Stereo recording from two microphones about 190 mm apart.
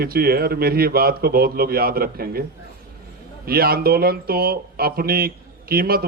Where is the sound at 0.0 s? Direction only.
55° right (ahead or behind).